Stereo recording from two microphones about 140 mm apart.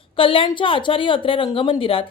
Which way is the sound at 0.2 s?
40° left (ahead or behind).